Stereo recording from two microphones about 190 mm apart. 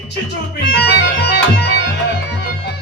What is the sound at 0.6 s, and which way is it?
Music, 60° left (ahead or behind).